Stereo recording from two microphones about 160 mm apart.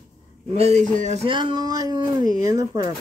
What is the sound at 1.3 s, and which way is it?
Speech, 30° right (ahead or behind).